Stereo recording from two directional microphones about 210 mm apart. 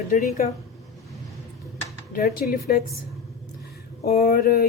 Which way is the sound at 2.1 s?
45° left (ahead or behind).